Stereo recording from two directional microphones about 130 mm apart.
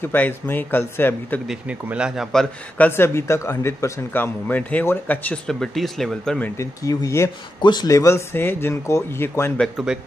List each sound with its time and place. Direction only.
0.0 s speech: 15° left (ahead or behind)
1.5 s speech: 10° right (ahead or behind)
2.8 s speech: 20° left (ahead or behind)
6.6 s speech: 25° left (ahead or behind)